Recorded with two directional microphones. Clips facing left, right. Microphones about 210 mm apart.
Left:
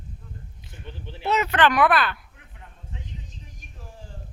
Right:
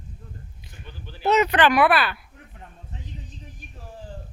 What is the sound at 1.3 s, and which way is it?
Speech, 20° right (ahead or behind).